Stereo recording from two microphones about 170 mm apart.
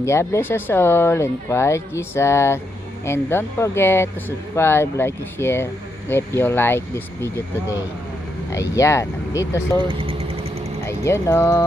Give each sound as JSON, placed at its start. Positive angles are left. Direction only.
{"t": 0.0, "sound": "speech", "side_deg": 15}
{"t": 8.5, "sound": "speech", "side_deg": 20}
{"t": 9.8, "sound": "speech", "side_deg": -30}
{"t": 10.9, "sound": "speech", "side_deg": 15}